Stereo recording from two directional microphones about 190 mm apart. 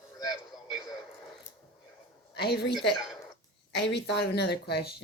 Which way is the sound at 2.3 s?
60° left (ahead or behind).